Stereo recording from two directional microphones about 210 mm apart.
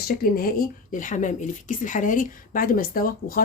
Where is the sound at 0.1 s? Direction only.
45° left (ahead or behind).